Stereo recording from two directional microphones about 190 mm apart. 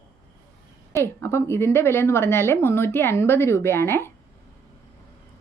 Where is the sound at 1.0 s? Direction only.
15° left (ahead or behind).